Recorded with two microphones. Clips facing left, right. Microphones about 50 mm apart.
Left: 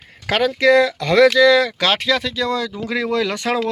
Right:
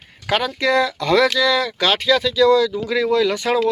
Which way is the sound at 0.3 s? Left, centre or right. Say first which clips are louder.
Left 4 dB; left.